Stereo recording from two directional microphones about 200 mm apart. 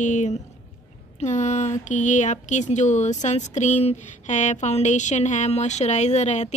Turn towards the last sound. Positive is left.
turn(degrees=35)  # may be behind; listen again after turning